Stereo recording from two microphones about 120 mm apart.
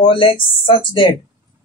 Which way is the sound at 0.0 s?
45° left (ahead or behind).